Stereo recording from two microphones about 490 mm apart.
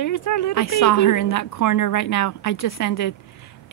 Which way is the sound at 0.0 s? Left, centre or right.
Left.